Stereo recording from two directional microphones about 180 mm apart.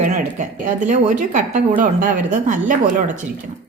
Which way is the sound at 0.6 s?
45° right (ahead or behind).